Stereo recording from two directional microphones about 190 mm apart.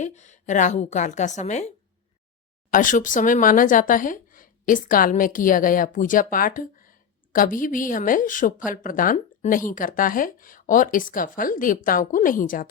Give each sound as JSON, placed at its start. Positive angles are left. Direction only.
{"t": 0.0, "sound": "a woman's voice", "side_deg": 40}
{"t": 2.7, "sound": "speech", "side_deg": 45}